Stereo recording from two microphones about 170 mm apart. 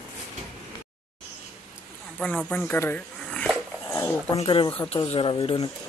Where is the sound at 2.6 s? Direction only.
10° left (ahead or behind).